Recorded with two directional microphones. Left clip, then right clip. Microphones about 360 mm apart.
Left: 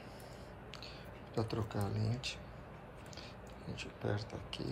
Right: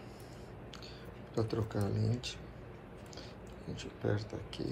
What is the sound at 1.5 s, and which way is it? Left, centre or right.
Speech, centre.